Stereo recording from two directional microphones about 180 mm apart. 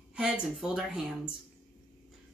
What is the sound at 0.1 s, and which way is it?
A woman's voice, 5° right (ahead or behind).